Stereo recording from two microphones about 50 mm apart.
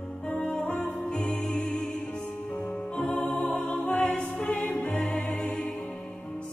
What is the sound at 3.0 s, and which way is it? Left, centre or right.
Music, left.